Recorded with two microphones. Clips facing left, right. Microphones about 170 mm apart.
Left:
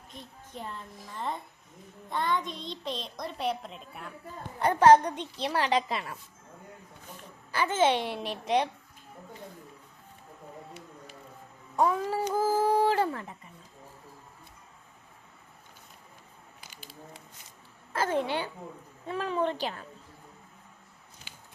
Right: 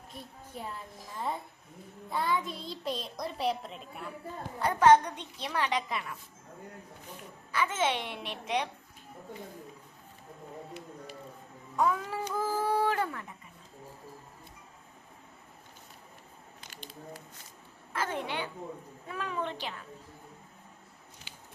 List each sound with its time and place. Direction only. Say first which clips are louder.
0.1 s a child's voice: even; 10° right (ahead or behind)
2.0 s a child's voice: left 1 dB; 5° right (ahead or behind)
4.6 s a child's voice: left 3 dB; 35° left (ahead or behind)
7.5 s a child's voice: left 5 dB; 35° left (ahead or behind)
11.8 s a child's voice: left 3 dB; 35° left (ahead or behind)
16.6 s a sound: right 3 dB; 5° left (ahead or behind)
17.9 s a woman's voice: left 5 dB; 35° left (ahead or behind)
21.3 s a sound: left 2 dB; 50° left (ahead or behind)